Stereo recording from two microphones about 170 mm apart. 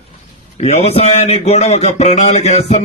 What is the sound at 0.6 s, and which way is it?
Mantra, 40° left (ahead or behind).